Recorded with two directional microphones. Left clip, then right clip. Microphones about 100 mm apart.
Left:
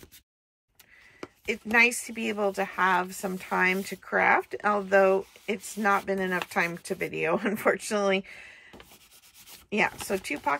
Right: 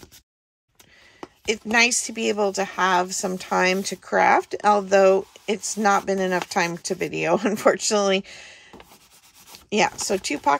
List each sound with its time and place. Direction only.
1.4 s speech: 25° right (ahead or behind)